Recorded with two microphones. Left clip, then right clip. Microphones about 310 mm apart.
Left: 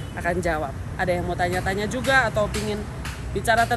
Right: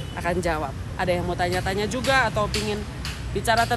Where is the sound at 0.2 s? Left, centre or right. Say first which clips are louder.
Left 1 dB; centre.